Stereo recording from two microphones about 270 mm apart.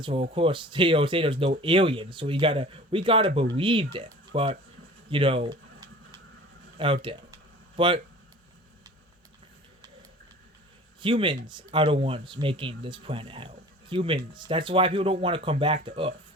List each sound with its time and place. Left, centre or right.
0.0 s speech: centre
5.0 s a sound: centre
6.7 s speech: centre
11.0 s speech: centre